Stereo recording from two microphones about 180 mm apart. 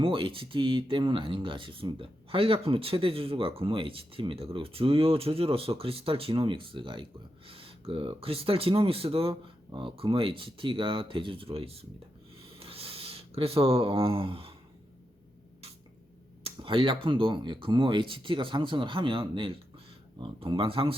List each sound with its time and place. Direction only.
0.0 s speech: 30° right (ahead or behind)
12.4 s a sound: 30° right (ahead or behind)
16.4 s speech: 30° right (ahead or behind)